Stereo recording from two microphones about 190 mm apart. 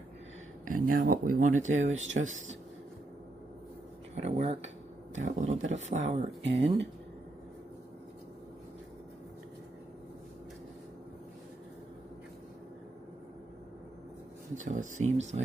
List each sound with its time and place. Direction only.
0.6 s speech: 45° right (ahead or behind)
4.2 s speech: 35° right (ahead or behind)
6.0 s speech: 70° right (ahead or behind)
14.6 s speech: 40° right (ahead or behind)